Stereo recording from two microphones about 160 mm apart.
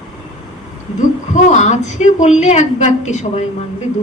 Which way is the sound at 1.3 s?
45° left (ahead or behind).